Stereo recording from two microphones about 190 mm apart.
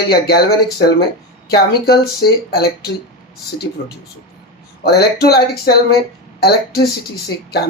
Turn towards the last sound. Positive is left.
turn(degrees=55)  # may be behind; listen again after turning